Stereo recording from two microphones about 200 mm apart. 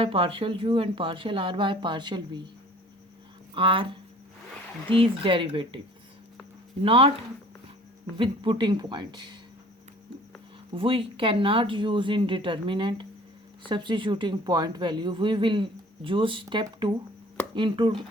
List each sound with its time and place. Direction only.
0.0 s speech: 25° right (ahead or behind)
3.5 s speech: 25° right (ahead or behind)
6.8 s speech: 30° right (ahead or behind)
8.1 s speech: 25° right (ahead or behind)
10.8 s speech: 25° right (ahead or behind)